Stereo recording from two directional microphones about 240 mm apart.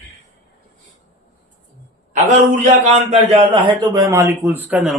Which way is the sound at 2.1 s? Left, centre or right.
Right.